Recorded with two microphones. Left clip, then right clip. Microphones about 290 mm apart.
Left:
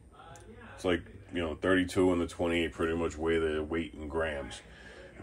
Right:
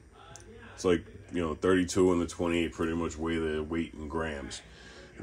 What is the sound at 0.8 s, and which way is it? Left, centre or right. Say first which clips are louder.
Speech: right 3 dB; centre.